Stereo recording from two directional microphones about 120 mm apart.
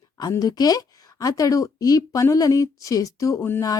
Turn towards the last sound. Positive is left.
turn(degrees=25)  # may be behind; listen again after turning